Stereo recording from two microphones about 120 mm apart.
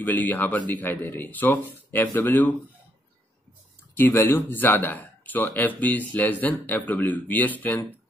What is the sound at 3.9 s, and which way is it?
Speech, 20° left (ahead or behind).